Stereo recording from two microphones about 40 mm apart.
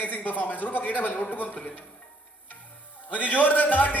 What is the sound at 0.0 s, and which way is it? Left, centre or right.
A man's voice, left.